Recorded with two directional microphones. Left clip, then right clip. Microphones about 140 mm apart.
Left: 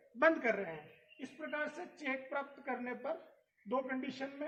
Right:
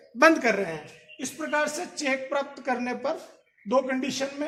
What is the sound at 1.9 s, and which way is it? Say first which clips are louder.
A woman's voice: right 12 dB; 45° right (ahead or behind).